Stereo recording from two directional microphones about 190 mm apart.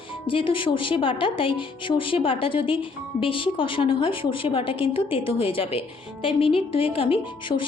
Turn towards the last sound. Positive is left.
turn(degrees=25)  # may be behind; listen again after turning